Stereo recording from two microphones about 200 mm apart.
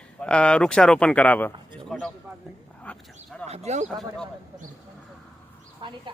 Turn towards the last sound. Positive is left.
turn(degrees=0)  # may be behind; listen again after turning